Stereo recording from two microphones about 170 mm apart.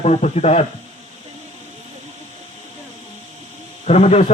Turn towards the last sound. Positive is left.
turn(degrees=40)  # may be behind; listen again after turning